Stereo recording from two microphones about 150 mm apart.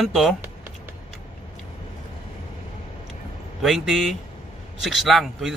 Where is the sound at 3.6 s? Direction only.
Centre (ahead or behind).